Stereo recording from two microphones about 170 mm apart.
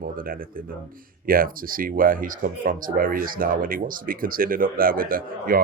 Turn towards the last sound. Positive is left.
turn(degrees=-55)  # may be behind; listen again after turning